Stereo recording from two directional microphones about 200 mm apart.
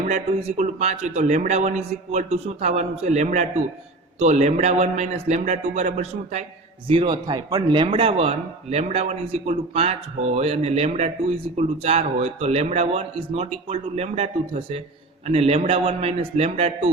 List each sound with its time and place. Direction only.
0.1 s speech: 35° right (ahead or behind)
6.8 s speech: 25° right (ahead or behind)